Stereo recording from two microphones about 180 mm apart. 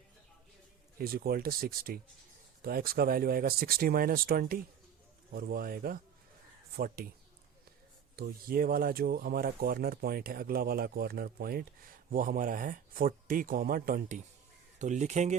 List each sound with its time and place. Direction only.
0.9 s speech: 55° right (ahead or behind)
8.1 s speech: 55° right (ahead or behind)
14.8 s speech: 40° right (ahead or behind)